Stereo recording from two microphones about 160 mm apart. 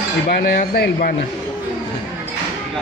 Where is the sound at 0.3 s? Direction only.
80° left.